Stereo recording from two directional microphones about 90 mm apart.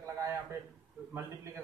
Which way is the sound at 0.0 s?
35° right (ahead or behind).